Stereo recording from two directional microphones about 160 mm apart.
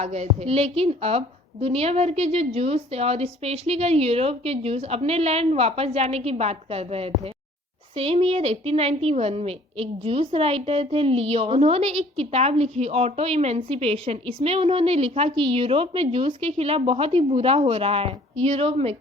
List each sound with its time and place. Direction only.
0.0 s a woman's voice: 45° right (ahead or behind)